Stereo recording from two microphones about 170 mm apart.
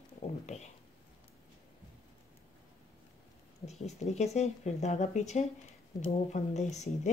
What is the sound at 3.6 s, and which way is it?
Speech, 40° left (ahead or behind).